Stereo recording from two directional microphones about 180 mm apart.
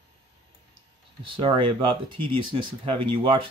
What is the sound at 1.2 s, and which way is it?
Speech, 30° right (ahead or behind).